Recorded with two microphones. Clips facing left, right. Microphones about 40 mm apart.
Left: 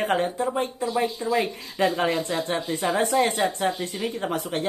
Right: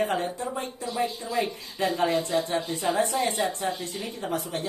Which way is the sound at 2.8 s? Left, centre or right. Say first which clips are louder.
Left 5 dB; left.